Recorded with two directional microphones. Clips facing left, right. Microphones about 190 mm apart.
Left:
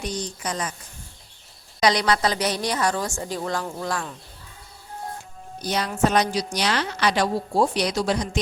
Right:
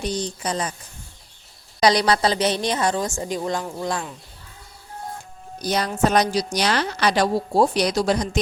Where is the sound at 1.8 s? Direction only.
35° right (ahead or behind); by 4.1 s 20° right (ahead or behind).